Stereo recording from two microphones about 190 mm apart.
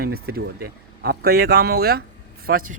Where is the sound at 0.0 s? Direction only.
55° right (ahead or behind).